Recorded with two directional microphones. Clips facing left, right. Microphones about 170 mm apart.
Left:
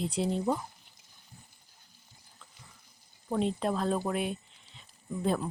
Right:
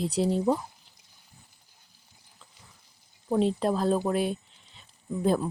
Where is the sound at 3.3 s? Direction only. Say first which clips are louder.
Right 5 dB; 35° right (ahead or behind).